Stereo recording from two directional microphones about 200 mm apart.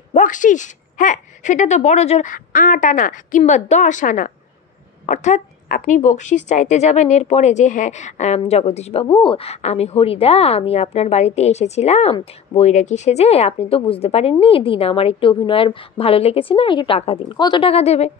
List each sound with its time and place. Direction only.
0.1 s speech: 40° left (ahead or behind)